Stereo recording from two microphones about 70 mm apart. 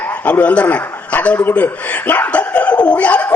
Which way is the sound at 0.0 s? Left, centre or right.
Left.